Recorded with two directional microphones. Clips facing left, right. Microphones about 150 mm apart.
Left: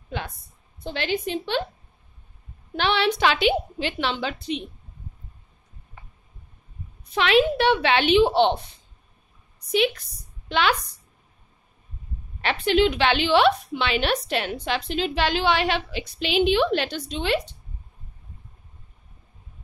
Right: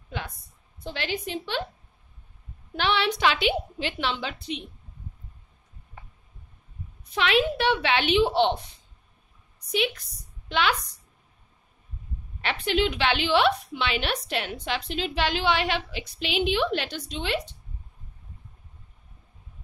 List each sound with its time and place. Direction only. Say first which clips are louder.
0.7 s a woman's voice: left 5 dB; 25° left (ahead or behind)
2.7 s a woman's voice: left 3 dB; 30° left (ahead or behind)
7.2 s a woman's voice: left 4 dB; 30° left (ahead or behind)
10.5 s a woman's voice: left 3 dB; 35° left (ahead or behind)
12.4 s a woman's voice: left 5 dB; 30° left (ahead or behind)